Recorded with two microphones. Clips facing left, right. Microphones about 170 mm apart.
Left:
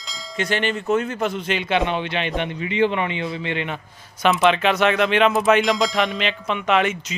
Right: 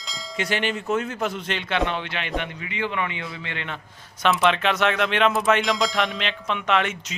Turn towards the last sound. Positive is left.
turn(degrees=5)  # may be behind; listen again after turning